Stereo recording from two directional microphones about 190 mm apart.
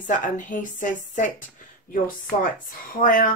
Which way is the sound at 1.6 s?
45° left (ahead or behind).